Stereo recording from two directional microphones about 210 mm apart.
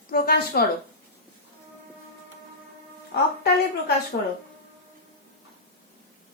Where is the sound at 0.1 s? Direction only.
45° left (ahead or behind).